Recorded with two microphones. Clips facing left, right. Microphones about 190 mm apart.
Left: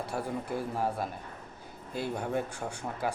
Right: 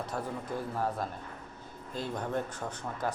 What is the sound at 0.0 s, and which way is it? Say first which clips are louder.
Speech: left 2 dB; 10° left (ahead or behind).